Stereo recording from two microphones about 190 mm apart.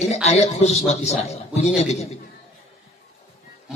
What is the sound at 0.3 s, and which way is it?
A man's voice, 35° left (ahead or behind).